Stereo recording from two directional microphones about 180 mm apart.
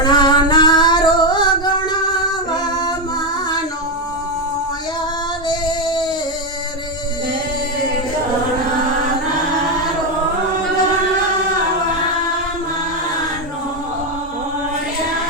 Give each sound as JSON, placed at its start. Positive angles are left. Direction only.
{"t": 0.0, "sound": "music", "side_deg": 25}
{"t": 5.5, "sound": "female singing", "side_deg": 25}